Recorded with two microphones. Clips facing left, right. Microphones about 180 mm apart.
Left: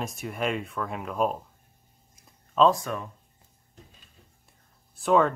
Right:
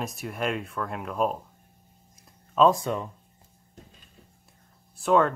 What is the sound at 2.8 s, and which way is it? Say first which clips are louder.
Speech: right 4 dB; 20° right (ahead or behind).